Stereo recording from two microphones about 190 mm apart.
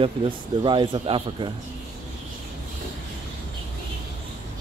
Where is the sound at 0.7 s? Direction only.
25° right (ahead or behind).